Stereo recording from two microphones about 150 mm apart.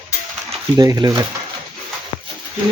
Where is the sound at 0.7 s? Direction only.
25° right (ahead or behind).